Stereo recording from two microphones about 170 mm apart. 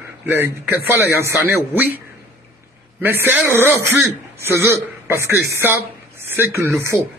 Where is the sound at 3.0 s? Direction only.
15° right (ahead or behind).